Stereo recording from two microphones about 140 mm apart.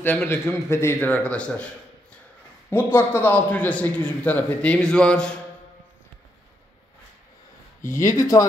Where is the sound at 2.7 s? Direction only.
15° left (ahead or behind).